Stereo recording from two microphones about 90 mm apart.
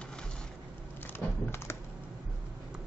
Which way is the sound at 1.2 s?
10° left (ahead or behind).